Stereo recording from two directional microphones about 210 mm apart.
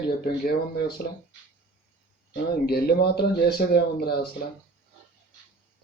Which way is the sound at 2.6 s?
50° left (ahead or behind).